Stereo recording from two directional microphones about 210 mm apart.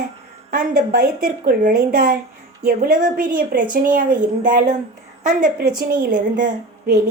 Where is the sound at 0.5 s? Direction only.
40° right (ahead or behind).